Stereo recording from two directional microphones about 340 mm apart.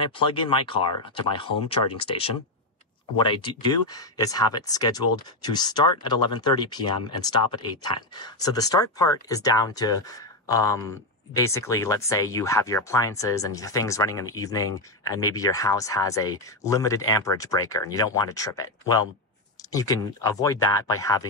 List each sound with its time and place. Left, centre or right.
0.0 s speech: centre